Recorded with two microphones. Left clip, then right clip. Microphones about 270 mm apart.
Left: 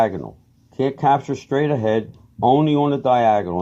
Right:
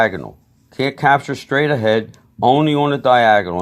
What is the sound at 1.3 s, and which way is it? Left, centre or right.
Speech, right.